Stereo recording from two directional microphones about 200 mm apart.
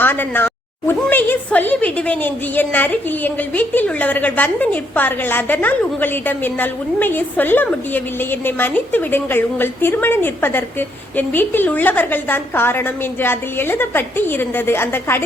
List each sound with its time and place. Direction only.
0.0 s a woman's voice: 10° left (ahead or behind)